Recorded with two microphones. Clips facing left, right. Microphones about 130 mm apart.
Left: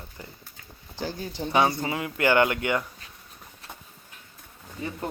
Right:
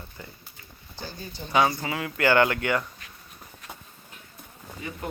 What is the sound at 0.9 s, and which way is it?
Speech, 90° left.